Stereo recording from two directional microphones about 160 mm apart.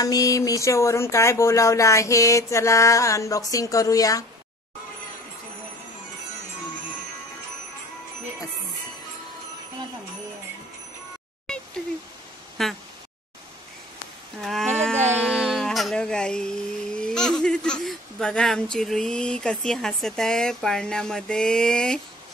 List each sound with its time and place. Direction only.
0.0 s speech: 20° left (ahead or behind)
11.4 s a sound: 5° left (ahead or behind)
12.6 s speech: centre (ahead or behind)
14.4 s a sound: centre (ahead or behind)
15.0 s music: 5° right (ahead or behind)
16.9 s speech: 5° left (ahead or behind)